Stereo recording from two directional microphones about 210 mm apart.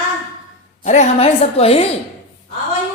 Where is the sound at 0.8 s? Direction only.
35° left (ahead or behind).